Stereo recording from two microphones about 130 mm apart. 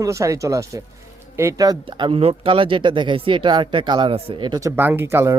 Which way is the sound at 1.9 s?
40° right (ahead or behind).